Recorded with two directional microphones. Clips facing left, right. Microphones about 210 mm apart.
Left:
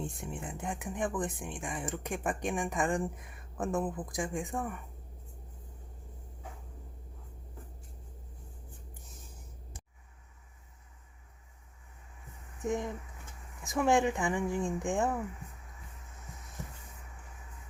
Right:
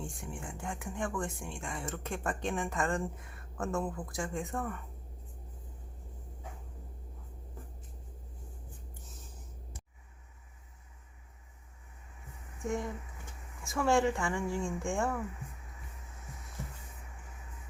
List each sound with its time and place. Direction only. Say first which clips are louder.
0.0 s speech: left 3 dB; 20° left (ahead or behind)
12.6 s speech: left 2 dB; 20° left (ahead or behind)